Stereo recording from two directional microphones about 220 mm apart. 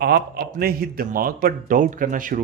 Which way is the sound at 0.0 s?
45° right (ahead or behind).